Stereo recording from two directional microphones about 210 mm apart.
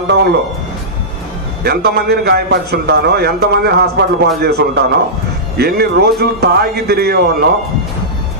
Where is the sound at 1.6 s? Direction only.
50° right (ahead or behind).